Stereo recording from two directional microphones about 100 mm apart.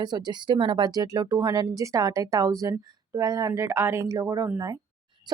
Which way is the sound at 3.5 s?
25° right (ahead or behind).